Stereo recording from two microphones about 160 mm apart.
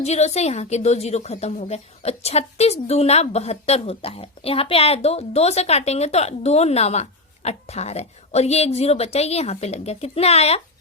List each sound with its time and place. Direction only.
0.0 s a woman's voice: 45° left (ahead or behind)